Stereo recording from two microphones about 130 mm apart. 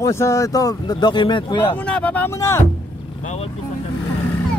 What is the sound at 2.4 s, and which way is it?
Speech, 20° left (ahead or behind).